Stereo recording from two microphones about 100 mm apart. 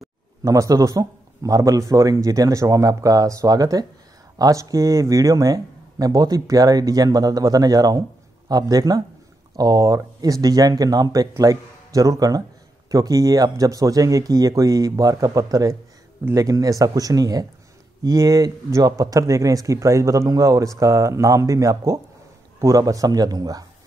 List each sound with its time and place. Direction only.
0.4 s speech: 30° right (ahead or behind)